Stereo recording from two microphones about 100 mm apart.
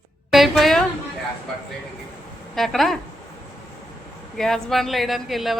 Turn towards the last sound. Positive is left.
turn(degrees=0)  # may be behind; listen again after turning